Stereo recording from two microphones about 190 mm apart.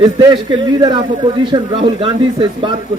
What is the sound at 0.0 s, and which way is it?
A man's voice, 25° right (ahead or behind).